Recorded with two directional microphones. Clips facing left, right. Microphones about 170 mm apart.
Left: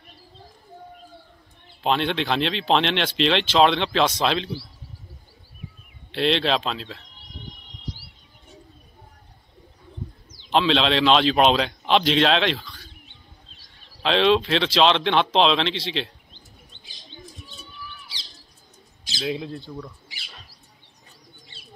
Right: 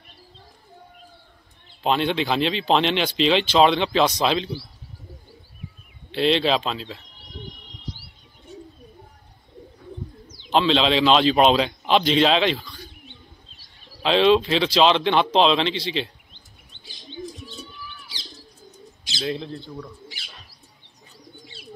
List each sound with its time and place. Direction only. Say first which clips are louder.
1.8 s speech: right 1 dB; centre (ahead or behind)
6.1 s speech: right 2 dB; centre (ahead or behind)
10.5 s speech: right 1 dB; centre (ahead or behind)
16.7 s chirp: right 1 dB; 40° left (ahead or behind)
19.1 s speech: even; 5° left (ahead or behind)